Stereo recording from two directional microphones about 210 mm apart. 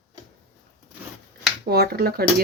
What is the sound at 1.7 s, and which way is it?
Speech, 50° right (ahead or behind).